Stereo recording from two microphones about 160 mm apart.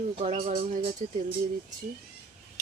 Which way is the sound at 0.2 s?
45° right (ahead or behind).